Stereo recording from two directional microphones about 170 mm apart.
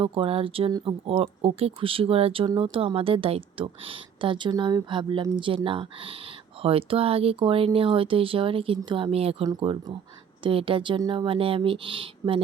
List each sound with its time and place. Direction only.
0.0 s a woman's voice: 30° right (ahead or behind)